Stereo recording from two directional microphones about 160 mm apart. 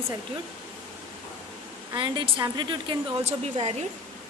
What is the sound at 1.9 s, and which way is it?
Speech, 30° right (ahead or behind).